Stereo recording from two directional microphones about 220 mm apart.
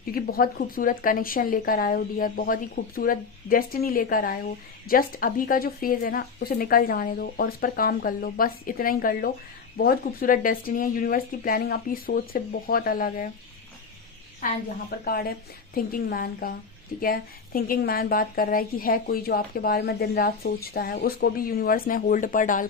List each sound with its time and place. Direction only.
0.1 s speech: 40° left (ahead or behind)
14.8 s a woman's voice: 45° left (ahead or behind)